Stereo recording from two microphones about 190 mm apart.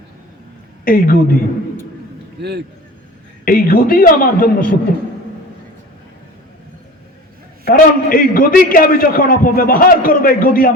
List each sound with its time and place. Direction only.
0.9 s a man's voice: 50° left (ahead or behind)
2.4 s a man's voice: 60° right (ahead or behind)
3.4 s a man's voice: 50° left (ahead or behind)
7.6 s a man's voice: 50° left (ahead or behind)